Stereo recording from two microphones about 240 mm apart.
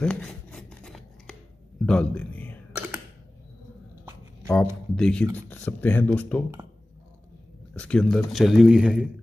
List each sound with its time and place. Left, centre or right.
0.0 s a sound: centre
1.9 s a man's voice: centre
4.5 s speech: centre
7.7 s a man's voice: centre